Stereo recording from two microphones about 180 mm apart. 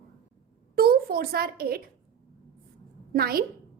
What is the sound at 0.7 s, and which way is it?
A child's voice, 55° right (ahead or behind).